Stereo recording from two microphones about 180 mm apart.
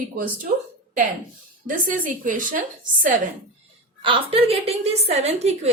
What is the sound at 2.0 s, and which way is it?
A woman's voice, 50° right (ahead or behind).